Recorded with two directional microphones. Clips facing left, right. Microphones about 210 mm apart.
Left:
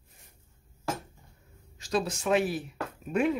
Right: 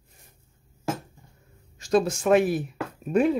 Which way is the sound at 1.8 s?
50° right (ahead or behind).